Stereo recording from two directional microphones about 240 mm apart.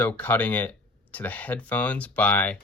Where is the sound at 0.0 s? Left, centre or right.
Centre.